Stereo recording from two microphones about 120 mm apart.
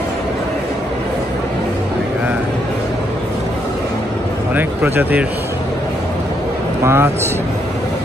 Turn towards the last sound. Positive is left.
turn(degrees=-20)  # may be behind; listen again after turning